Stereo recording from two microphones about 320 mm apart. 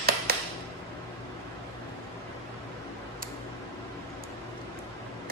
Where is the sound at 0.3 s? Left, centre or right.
Right.